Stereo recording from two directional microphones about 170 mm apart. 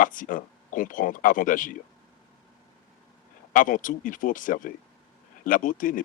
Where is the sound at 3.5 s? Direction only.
50° left (ahead or behind).